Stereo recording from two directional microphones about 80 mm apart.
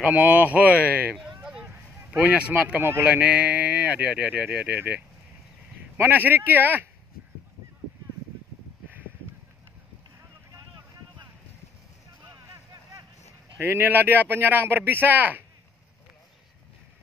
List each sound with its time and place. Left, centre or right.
0.0 s speech: right
1.2 s a sound: centre
2.1 s speech: centre
2.8 s speech: right
3.3 s speech: centre
13.6 s speech: right